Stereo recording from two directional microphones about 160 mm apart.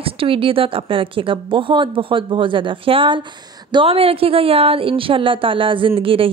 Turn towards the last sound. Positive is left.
turn(degrees=-35)  # may be behind; listen again after turning